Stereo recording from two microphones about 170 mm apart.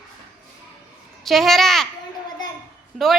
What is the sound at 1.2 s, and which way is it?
Speech, centre (ahead or behind).